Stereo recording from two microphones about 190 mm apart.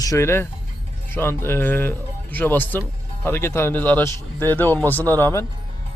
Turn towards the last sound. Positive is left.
turn(degrees=10)  # may be behind; listen again after turning